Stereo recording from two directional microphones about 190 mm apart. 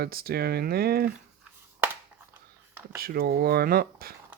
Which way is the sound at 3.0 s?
50° right (ahead or behind).